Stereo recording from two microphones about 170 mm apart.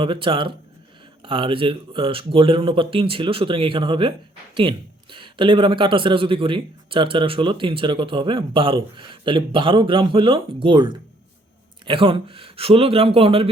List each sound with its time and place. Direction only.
0.0 s speech: 30° right (ahead or behind)
5.1 s speech: 30° right (ahead or behind)